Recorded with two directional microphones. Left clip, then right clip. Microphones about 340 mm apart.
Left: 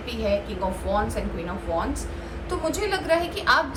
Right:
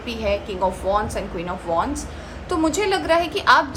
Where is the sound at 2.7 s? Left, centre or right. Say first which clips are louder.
Right 3 dB; right.